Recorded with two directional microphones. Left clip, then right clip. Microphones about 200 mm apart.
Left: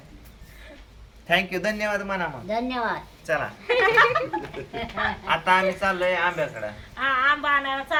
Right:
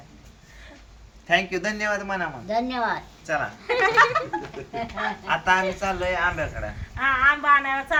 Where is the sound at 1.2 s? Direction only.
25° left (ahead or behind).